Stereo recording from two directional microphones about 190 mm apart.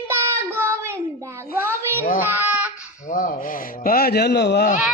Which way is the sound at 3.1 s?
45° left (ahead or behind).